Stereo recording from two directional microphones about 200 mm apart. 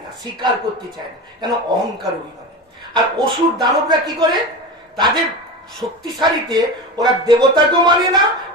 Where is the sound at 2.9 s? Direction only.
20° right (ahead or behind).